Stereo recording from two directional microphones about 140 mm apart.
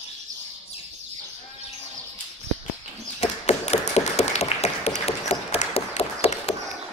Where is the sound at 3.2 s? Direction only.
50° left (ahead or behind).